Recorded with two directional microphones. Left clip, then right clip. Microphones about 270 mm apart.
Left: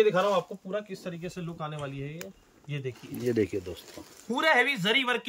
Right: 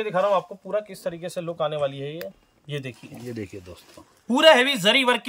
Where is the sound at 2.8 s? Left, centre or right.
Centre.